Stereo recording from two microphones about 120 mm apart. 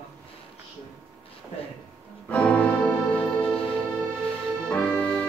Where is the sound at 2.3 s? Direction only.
10° left (ahead or behind).